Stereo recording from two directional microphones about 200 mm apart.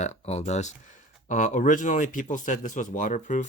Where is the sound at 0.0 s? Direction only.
35° left (ahead or behind).